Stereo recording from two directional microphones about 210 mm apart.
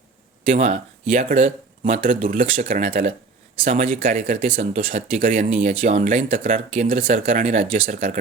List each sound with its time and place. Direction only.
0.5 s speech: 30° right (ahead or behind)
4.5 s speech: 30° right (ahead or behind)
7.2 s speech: 30° right (ahead or behind)